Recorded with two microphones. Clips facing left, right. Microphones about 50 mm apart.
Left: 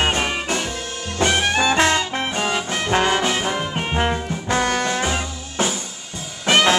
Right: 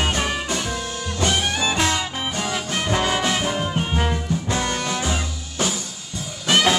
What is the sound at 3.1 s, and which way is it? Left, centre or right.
Brass instrument, centre.